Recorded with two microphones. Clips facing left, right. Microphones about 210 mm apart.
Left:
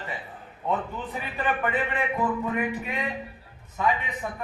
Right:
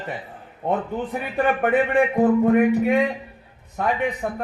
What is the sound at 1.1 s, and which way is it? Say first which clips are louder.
A man's voice: right 7 dB; 60° right (ahead or behind).